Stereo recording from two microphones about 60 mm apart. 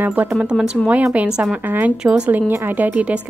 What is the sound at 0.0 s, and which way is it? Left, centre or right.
Speech, right.